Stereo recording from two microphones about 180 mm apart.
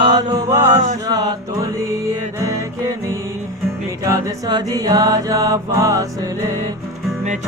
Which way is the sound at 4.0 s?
20° right (ahead or behind).